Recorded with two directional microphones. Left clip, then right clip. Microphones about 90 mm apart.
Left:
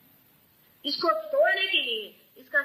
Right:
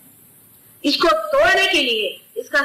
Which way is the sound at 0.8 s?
5° left (ahead or behind).